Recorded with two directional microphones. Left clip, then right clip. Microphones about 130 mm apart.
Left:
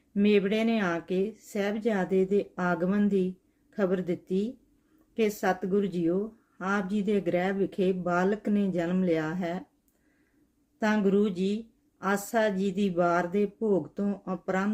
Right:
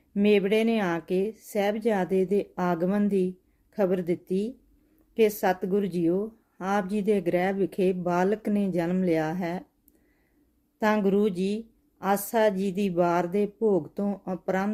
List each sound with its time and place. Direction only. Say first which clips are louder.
0.1 s a woman's voice: right 3 dB; 25° right (ahead or behind)
10.8 s a woman's voice: right 2 dB; 25° right (ahead or behind)